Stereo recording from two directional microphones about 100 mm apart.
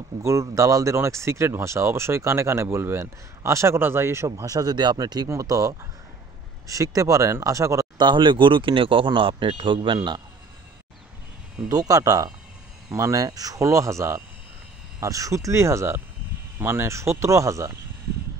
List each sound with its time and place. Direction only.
0.2 s speech: 30° right (ahead or behind)
8.0 s a man's voice: 55° right (ahead or behind)
11.7 s speech: 35° right (ahead or behind)